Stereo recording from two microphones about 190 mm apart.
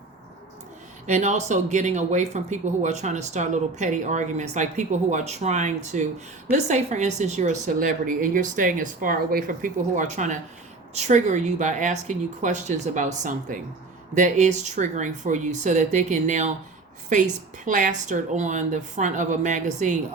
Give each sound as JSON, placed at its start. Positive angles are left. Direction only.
{"t": 1.0, "sound": "speech", "side_deg": -40}
{"t": 17.7, "sound": "speech", "side_deg": -40}